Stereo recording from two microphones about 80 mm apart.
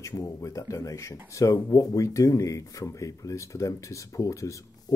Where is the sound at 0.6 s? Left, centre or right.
Left.